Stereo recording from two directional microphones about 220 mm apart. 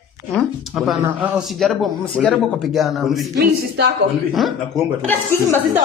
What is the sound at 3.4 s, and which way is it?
Speech, 45° right (ahead or behind).